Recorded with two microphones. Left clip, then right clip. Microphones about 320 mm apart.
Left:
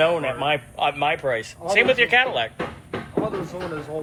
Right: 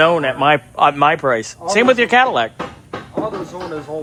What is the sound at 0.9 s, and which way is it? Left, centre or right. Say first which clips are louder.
Speech: right 8 dB; right.